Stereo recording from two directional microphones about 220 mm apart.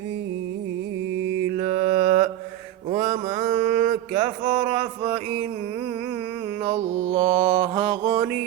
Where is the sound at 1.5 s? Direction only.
40° right (ahead or behind).